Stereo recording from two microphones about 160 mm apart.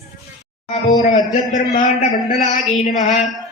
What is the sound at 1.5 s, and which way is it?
A man's voice, 55° left (ahead or behind).